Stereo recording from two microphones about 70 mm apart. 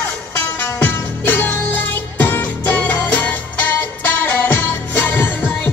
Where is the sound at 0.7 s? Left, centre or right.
Left.